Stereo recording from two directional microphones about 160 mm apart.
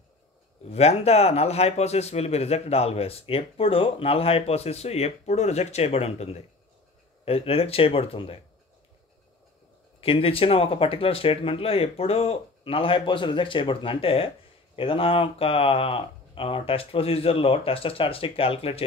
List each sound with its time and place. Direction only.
0.7 s speech: 40° left (ahead or behind)
9.9 s speech: 35° left (ahead or behind)